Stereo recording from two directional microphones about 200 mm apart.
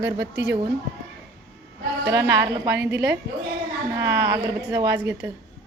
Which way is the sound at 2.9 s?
55° right (ahead or behind).